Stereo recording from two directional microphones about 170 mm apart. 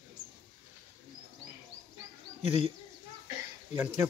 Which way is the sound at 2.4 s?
40° left (ahead or behind).